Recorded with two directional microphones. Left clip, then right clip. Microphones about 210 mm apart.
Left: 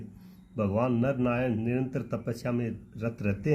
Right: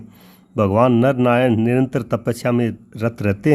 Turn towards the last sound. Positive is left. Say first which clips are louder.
# right 12 dB
turn(degrees=-45)  # may be behind; listen again after turning